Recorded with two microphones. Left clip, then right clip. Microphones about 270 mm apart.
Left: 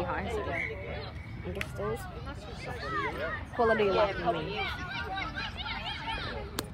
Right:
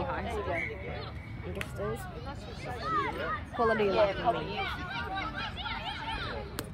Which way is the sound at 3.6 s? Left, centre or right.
Left.